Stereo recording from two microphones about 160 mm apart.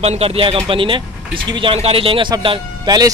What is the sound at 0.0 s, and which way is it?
A man's voice, 40° right (ahead or behind).